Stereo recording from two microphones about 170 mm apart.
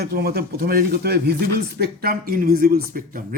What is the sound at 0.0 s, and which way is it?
Speech, 65° right (ahead or behind).